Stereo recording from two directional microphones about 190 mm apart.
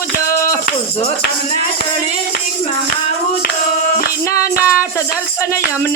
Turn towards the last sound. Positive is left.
turn(degrees=15)  # may be behind; listen again after turning